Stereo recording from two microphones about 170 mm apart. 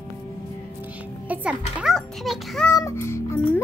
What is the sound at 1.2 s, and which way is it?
A child's voice, 10° right (ahead or behind).